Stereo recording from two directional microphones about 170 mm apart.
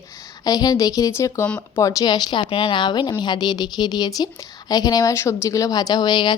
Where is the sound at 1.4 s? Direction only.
5° left (ahead or behind).